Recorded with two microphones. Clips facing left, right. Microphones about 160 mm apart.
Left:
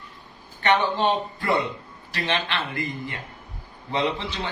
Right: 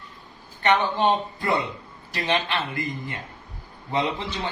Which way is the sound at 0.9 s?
15° right (ahead or behind).